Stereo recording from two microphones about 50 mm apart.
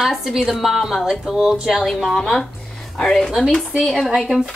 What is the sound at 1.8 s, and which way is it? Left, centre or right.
Speech, centre.